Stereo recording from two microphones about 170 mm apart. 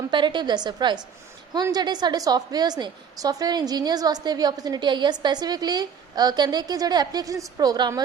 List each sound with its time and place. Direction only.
0.1 s a woman's voice: 25° right (ahead or behind)